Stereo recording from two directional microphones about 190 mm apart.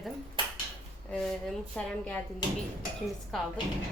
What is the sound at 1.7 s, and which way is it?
Speech, 5° left (ahead or behind).